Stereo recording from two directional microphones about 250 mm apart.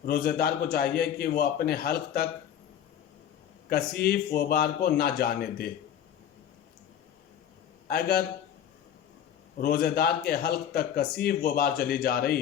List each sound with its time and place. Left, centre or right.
0.0 s speech: left
3.7 s speech: left
7.9 s speech: left
9.6 s speech: left